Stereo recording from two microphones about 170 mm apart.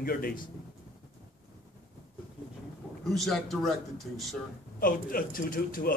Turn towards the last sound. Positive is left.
turn(degrees=55)  # may be behind; listen again after turning